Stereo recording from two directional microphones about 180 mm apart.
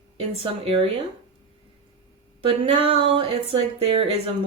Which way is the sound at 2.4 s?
30° right (ahead or behind).